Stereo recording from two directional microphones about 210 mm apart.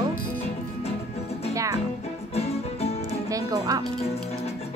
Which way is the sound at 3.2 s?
15° right (ahead or behind).